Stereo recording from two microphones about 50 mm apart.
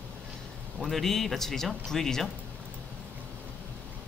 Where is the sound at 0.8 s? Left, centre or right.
Centre.